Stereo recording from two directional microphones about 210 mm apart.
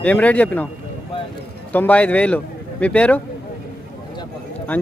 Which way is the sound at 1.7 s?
10° left (ahead or behind).